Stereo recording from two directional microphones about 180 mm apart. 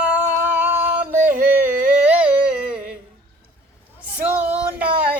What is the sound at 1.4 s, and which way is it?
Carnatic music, 50° right (ahead or behind).